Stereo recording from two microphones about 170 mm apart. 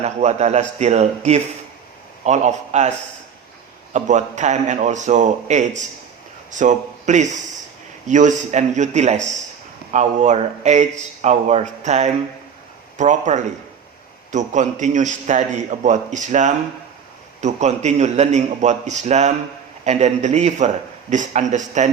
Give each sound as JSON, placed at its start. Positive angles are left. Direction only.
{"t": 0.0, "sound": "a man's voice", "side_deg": -40}
{"t": 3.9, "sound": "a man's voice", "side_deg": -45}